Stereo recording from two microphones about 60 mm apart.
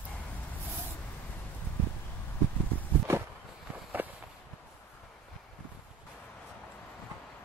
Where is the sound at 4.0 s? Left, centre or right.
Right.